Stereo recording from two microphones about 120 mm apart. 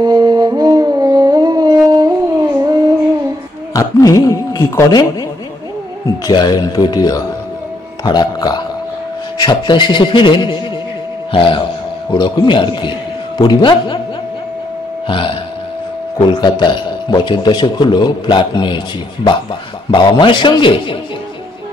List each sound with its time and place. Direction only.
0.0 s music: 35° right (ahead or behind)
1.9 s howl: 35° right (ahead or behind)
2.2 s a sound: 25° right (ahead or behind)
3.7 s speech: 25° left (ahead or behind)
6.2 s a man's voice: 35° left (ahead or behind)
15.0 s a man's voice: 45° left (ahead or behind)
19.9 s a man's voice: 40° left (ahead or behind)